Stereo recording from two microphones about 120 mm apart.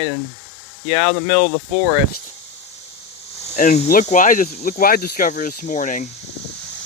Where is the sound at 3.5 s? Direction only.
85° left.